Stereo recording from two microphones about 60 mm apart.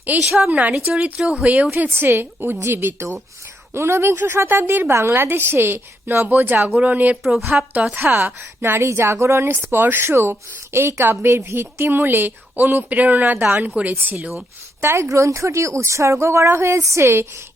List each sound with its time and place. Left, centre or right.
0.3 s speech: right
1.2 s speech: centre
1.9 s a woman's voice: right
7.2 s a woman's voice: centre
7.9 s a woman's voice: right
8.8 s a woman's voice: right
14.8 s a woman's voice: right